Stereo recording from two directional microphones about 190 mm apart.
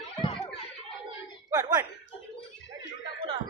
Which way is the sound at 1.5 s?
15° right (ahead or behind).